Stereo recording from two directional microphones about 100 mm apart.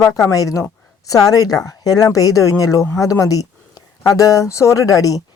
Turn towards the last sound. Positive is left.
turn(degrees=35)  # may be behind; listen again after turning